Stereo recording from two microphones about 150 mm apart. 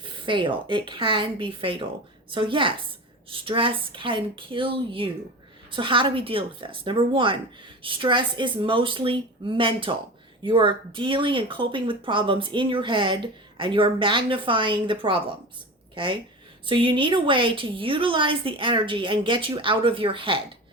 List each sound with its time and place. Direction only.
0.0 s speech: 35° right (ahead or behind)
16.6 s speech: 35° right (ahead or behind)